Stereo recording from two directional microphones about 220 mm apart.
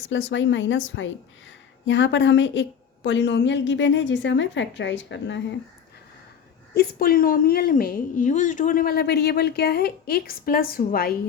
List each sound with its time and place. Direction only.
0.1 s a woman's voice: 55° left (ahead or behind)
6.7 s a woman's voice: 45° left (ahead or behind)